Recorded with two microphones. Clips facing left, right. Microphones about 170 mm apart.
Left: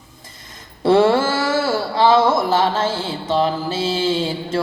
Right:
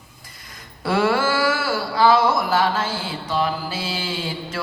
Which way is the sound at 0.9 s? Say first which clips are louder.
Left 6 dB; 25° left (ahead or behind).